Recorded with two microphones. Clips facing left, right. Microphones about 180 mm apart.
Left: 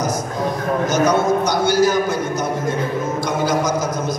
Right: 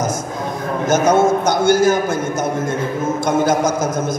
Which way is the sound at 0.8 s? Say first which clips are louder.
Right 4 dB; 50° right (ahead or behind).